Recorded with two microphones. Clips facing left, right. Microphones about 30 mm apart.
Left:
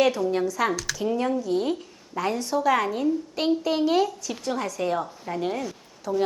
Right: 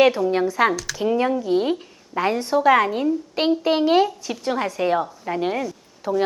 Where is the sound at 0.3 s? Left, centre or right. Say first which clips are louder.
Right 5 dB; right.